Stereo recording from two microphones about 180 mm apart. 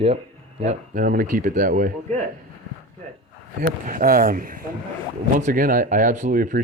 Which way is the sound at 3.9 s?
50° right (ahead or behind).